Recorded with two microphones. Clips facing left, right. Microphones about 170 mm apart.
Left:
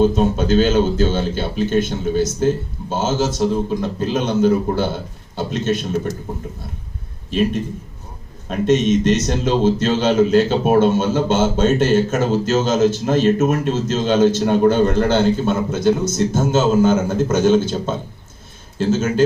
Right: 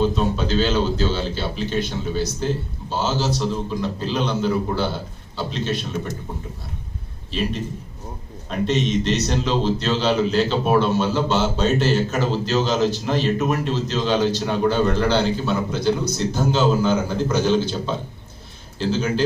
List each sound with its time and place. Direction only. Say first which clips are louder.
0.0 s a man's voice: left 5 dB; 50° left (ahead or behind)
7.3 s a man's voice: left 6 dB; 50° left (ahead or behind)